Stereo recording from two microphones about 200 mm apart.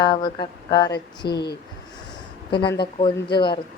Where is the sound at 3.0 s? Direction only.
25° left (ahead or behind).